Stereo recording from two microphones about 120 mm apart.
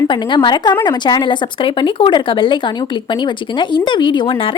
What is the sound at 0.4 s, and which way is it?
Speech, 40° left (ahead or behind).